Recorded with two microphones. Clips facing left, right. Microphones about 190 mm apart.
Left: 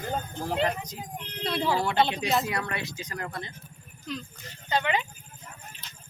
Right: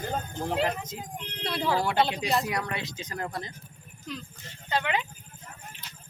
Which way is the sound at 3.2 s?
35° right (ahead or behind).